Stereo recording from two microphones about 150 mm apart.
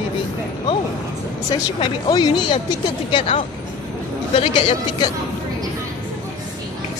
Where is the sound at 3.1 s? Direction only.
40° left (ahead or behind).